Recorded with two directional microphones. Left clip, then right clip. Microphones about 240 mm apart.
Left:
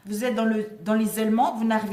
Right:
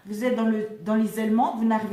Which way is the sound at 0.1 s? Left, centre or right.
Left.